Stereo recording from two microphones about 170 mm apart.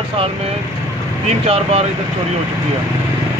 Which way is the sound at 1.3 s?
35° right (ahead or behind).